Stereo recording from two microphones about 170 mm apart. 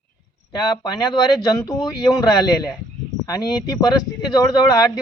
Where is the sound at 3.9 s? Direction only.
20° left (ahead or behind).